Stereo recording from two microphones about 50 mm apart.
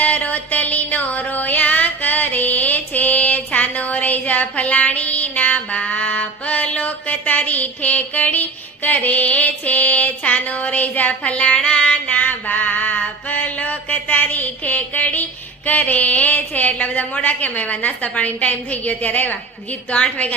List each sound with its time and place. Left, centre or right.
0.0 s music: left
12.0 s mantra: left
15.6 s a woman's voice: left